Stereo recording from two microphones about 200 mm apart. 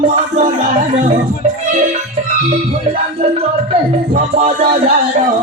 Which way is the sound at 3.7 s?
30° right (ahead or behind).